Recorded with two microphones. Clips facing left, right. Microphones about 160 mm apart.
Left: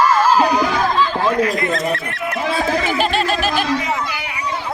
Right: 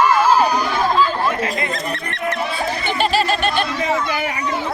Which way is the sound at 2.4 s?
90° left.